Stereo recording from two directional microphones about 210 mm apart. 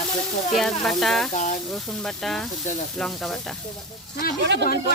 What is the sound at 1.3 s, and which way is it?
Speech, 35° left (ahead or behind).